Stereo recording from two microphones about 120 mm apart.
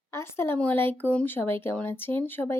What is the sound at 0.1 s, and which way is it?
Speech, 20° left (ahead or behind).